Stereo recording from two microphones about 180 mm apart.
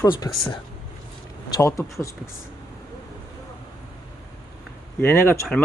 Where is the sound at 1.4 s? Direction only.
20° left (ahead or behind).